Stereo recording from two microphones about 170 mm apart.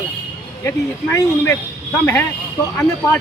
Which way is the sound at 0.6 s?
15° left (ahead or behind).